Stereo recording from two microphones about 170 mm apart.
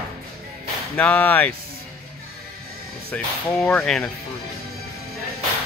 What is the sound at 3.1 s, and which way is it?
Speech, 5° left (ahead or behind).